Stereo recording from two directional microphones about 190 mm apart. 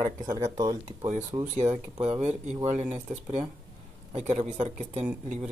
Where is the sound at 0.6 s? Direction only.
20° right (ahead or behind).